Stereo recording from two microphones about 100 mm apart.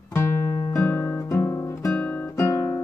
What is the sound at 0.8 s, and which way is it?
Music, 25° left (ahead or behind).